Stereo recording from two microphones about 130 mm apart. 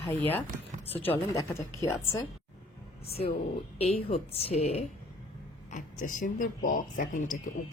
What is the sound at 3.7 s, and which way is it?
A woman's voice, 50° left (ahead or behind).